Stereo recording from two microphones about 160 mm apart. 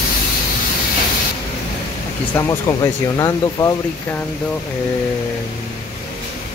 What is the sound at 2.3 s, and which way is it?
Speech, 20° left (ahead or behind).